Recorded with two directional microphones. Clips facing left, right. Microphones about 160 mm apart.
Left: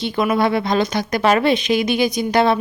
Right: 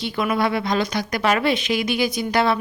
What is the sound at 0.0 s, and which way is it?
Speech, 25° left (ahead or behind).